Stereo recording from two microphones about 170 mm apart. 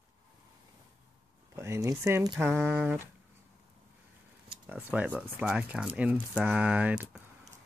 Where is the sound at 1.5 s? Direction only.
15° right (ahead or behind).